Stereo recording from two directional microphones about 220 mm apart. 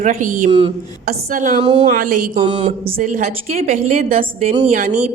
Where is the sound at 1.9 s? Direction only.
35° right (ahead or behind).